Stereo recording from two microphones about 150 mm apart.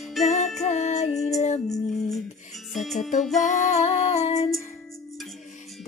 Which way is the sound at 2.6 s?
Centre (ahead or behind).